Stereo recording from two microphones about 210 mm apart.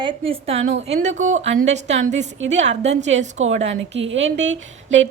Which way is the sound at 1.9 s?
60° right (ahead or behind).